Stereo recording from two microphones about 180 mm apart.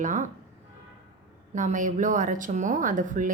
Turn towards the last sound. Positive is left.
turn(degrees=-45)  # may be behind; listen again after turning